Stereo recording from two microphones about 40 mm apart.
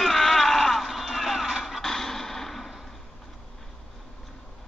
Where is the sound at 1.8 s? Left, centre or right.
Centre.